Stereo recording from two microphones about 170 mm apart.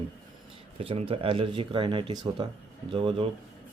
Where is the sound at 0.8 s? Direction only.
35° right (ahead or behind).